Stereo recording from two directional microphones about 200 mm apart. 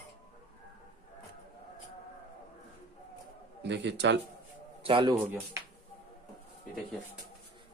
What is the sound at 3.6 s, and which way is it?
Speech, 60° right (ahead or behind).